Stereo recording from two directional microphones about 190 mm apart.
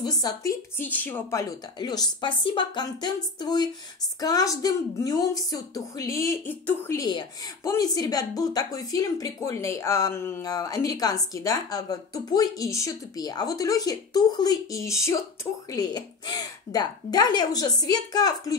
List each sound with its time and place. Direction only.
0.0 s a woman's voice: 20° left (ahead or behind)